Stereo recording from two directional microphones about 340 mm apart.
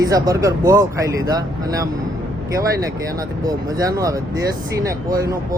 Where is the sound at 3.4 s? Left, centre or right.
Centre.